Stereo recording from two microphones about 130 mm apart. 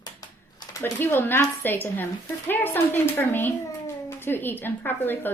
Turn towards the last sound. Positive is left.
turn(degrees=15)  # may be behind; listen again after turning